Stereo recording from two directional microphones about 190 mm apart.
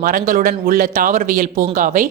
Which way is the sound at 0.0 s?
45° right (ahead or behind).